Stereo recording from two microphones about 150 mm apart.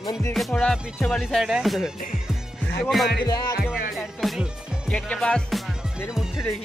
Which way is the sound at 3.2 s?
25° left (ahead or behind).